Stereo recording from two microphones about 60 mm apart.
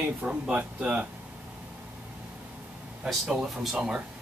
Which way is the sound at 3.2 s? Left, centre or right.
Centre.